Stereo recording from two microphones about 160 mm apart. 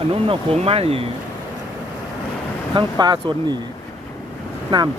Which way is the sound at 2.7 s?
25° right (ahead or behind).